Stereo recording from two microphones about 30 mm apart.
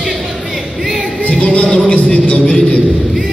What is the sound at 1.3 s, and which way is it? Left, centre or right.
Music, left.